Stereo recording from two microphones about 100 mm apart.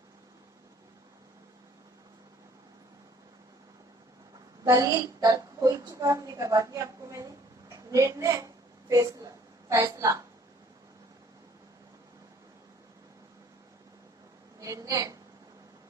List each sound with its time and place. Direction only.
4.6 s a woman's voice: 35° right (ahead or behind)
7.7 s a sound: 35° right (ahead or behind)
14.6 s a woman's voice: 35° right (ahead or behind)